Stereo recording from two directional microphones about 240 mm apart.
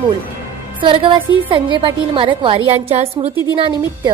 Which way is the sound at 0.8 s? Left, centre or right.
Right.